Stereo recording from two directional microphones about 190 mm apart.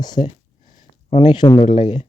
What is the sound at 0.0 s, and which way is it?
Speech, 20° left (ahead or behind).